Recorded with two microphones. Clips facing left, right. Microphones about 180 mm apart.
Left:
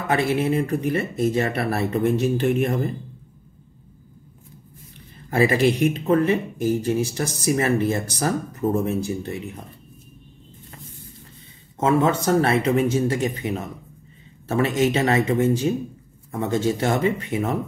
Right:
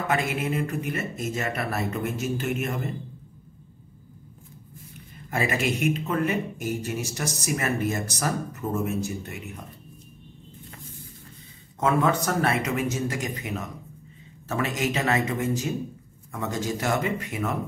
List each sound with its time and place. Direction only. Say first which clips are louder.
0.1 s speech: left 7 dB; 30° left (ahead or behind)
5.3 s speech: left 8 dB; 30° left (ahead or behind)
11.8 s speech: left 4 dB; 30° left (ahead or behind)